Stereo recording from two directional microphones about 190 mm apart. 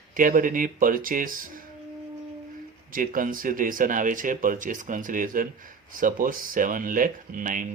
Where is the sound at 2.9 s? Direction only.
45° right (ahead or behind).